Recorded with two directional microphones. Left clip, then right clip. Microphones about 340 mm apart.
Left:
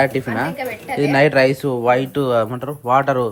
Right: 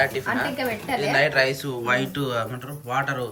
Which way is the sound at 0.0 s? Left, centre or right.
Centre.